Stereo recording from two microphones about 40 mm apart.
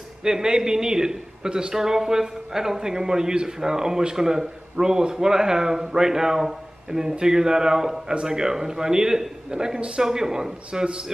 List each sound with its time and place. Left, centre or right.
0.2 s a man's voice: centre
10.0 s a man's voice: centre